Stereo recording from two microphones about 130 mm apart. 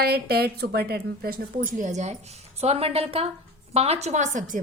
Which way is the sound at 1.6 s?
80° right.